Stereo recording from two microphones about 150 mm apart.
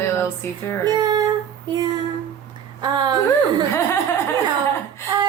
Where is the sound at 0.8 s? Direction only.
25° right (ahead or behind).